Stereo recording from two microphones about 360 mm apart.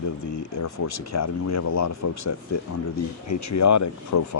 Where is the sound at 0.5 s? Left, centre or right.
Left.